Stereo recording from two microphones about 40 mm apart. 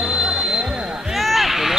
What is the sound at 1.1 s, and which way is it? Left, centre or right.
Basketball bounce, centre.